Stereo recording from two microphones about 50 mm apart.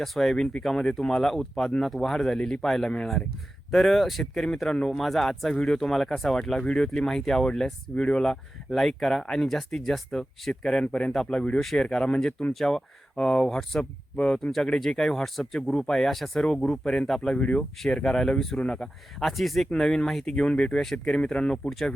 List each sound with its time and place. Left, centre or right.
0.0 s speech: centre
8.3 s speech: centre; by 17.7 s left
17.8 s speech: centre
19.2 s speech: centre
19.7 s speech: centre